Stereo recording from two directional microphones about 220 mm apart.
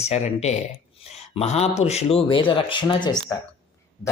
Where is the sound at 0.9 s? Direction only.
30° left (ahead or behind).